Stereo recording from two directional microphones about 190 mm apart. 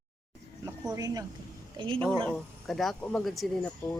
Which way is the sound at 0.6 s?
20° right (ahead or behind).